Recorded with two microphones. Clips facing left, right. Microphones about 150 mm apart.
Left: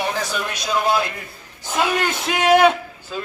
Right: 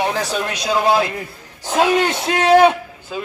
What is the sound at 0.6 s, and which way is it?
Speech, 30° right (ahead or behind).